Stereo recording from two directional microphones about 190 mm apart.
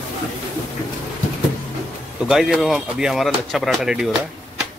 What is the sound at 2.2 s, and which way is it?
Speech, centre (ahead or behind).